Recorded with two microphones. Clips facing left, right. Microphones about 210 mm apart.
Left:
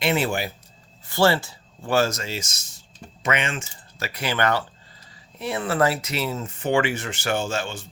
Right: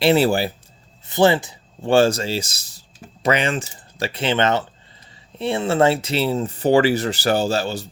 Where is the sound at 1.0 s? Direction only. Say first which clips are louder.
Right 4 dB; 20° right (ahead or behind).